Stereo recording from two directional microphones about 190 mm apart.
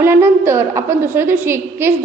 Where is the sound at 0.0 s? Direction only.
10° right (ahead or behind).